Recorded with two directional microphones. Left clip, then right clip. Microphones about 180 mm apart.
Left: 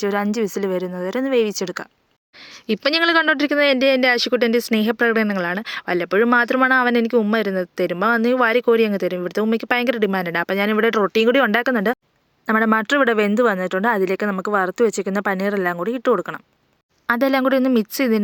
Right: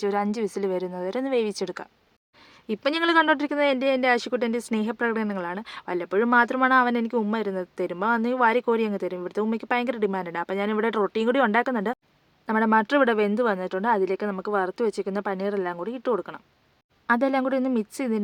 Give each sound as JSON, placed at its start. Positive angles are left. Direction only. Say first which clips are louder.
{"t": 0.0, "sound": "speech", "louder": "left 4 dB", "side_deg": 25}